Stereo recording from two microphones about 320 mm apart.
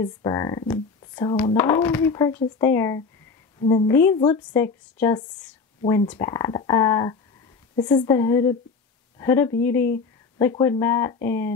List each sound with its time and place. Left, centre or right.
0.0 s speech: centre